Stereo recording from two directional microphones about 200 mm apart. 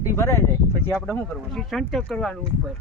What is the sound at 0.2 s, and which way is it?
Speech, 15° left (ahead or behind).